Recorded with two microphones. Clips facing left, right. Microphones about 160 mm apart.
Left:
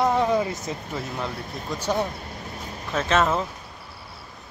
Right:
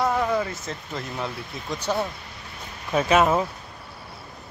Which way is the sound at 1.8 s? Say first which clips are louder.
Left 1 dB; 15° left (ahead or behind).